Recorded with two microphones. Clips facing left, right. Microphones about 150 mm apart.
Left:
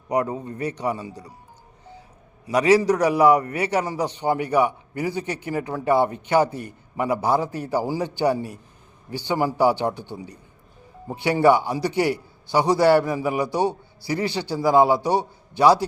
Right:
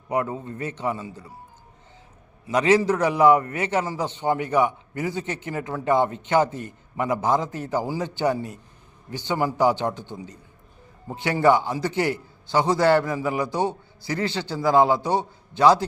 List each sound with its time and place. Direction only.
0.3 s a man's voice: 15° left (ahead or behind)
2.6 s a man's voice: 15° left (ahead or behind)